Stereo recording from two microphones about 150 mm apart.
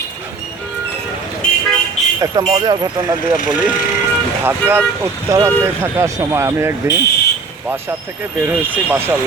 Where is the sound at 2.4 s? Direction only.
30° right (ahead or behind).